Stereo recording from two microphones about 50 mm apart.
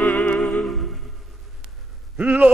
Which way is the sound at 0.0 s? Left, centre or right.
Left.